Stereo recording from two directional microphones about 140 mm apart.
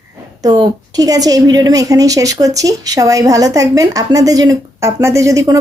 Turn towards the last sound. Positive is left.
turn(degrees=-25)  # may be behind; listen again after turning